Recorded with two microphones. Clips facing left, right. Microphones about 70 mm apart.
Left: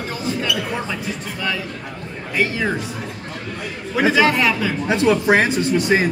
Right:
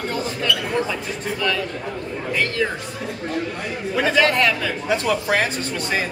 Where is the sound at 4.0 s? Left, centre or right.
Centre.